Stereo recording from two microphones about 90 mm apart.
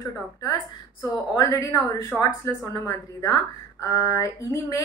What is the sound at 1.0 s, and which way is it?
A woman's voice, 40° left (ahead or behind).